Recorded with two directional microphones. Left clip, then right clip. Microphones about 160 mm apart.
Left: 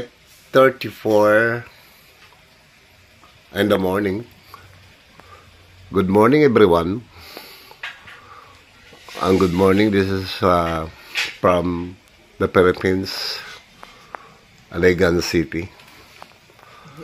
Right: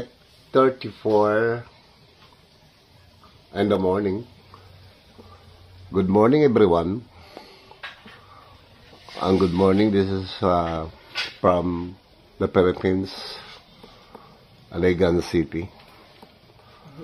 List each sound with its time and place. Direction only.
0.5 s speech: 30° left (ahead or behind)
3.5 s speech: 25° left (ahead or behind)
5.9 s speech: 10° left (ahead or behind)
9.2 s speech: 15° left (ahead or behind)
14.7 s speech: 5° left (ahead or behind)